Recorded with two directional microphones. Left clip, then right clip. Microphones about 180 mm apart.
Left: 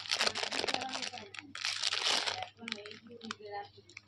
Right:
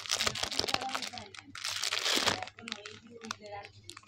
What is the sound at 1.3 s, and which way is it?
Crumpling, 5° left (ahead or behind).